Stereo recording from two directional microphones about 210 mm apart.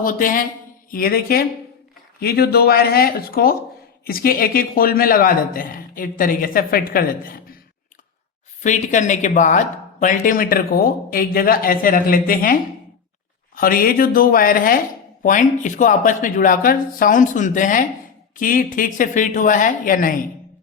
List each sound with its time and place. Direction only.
0.0 s a man's voice: 40° left (ahead or behind)
8.6 s speech: 35° left (ahead or behind)
13.6 s a man's voice: 45° left (ahead or behind)